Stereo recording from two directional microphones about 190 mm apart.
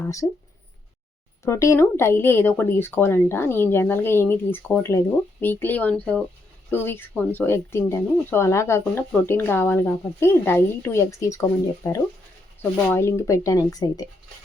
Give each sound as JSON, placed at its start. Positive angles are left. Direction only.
{"t": 0.0, "sound": "speech", "side_deg": 15}
{"t": 1.5, "sound": "speech", "side_deg": 15}